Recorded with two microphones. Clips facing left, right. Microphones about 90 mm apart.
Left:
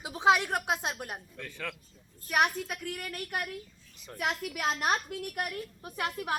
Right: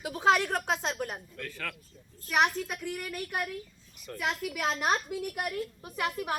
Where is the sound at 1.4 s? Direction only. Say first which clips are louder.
Even; 20° left (ahead or behind).